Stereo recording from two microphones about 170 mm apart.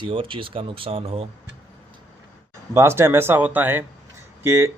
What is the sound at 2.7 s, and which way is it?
Speech, 15° right (ahead or behind).